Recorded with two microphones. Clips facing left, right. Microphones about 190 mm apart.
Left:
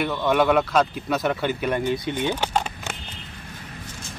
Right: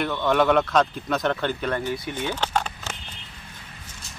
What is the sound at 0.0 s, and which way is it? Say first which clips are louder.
Speech: left 1 dB; 5° left (ahead or behind).